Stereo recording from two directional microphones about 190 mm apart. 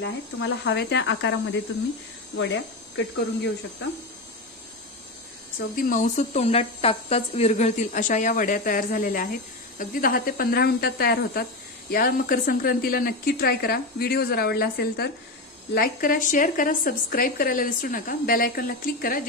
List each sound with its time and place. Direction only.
0.0 s speech: 75° left (ahead or behind)
5.8 s a woman's voice: 45° left (ahead or behind)